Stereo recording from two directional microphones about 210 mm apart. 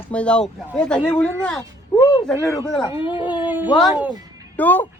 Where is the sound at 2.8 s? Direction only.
25° left (ahead or behind).